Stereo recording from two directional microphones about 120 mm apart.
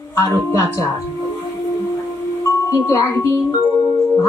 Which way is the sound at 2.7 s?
25° left (ahead or behind).